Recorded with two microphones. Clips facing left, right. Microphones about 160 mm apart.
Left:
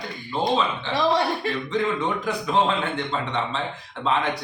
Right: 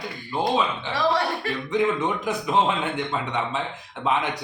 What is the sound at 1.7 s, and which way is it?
A man's voice, 20° right (ahead or behind).